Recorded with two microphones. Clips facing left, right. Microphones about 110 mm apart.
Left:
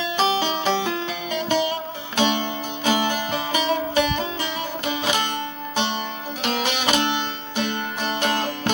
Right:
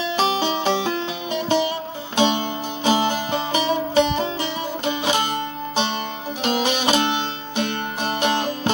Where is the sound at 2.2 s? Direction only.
30° right (ahead or behind).